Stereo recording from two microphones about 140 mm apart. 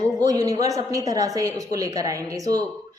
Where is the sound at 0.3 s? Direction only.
25° right (ahead or behind).